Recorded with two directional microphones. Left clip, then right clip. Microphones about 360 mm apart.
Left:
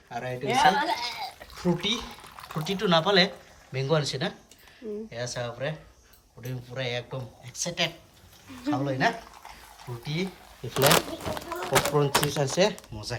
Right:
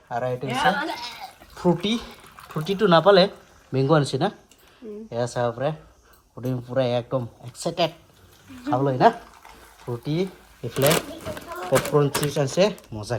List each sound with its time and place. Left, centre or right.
0.4 s a woman's voice: left
1.5 s speech: centre